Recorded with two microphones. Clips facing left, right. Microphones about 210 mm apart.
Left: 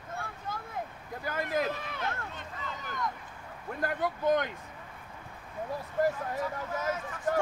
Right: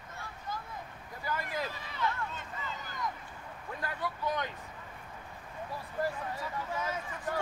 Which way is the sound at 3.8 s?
50° left (ahead or behind).